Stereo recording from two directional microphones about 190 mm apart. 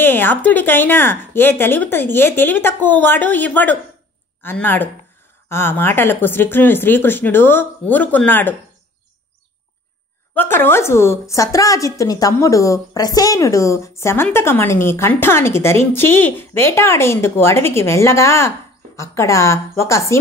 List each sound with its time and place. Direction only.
0.0 s a woman's voice: 10° left (ahead or behind)
10.3 s a woman's voice: 10° left (ahead or behind)